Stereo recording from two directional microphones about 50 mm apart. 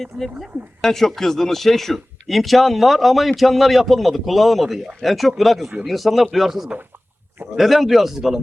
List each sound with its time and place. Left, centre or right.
0.8 s speech: centre